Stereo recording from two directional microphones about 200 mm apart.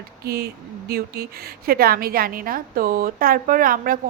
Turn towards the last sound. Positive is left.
turn(degrees=-45)  # may be behind; listen again after turning